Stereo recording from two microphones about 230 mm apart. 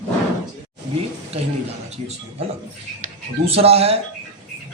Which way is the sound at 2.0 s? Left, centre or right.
Right.